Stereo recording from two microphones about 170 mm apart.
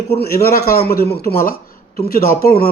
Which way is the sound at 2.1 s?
60° left (ahead or behind).